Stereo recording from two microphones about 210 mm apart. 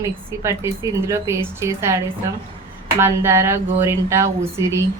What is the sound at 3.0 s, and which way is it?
A woman's voice, 15° right (ahead or behind).